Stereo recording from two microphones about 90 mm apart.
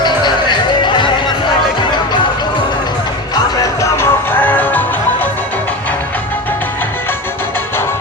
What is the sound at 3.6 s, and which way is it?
Music, 35° left (ahead or behind).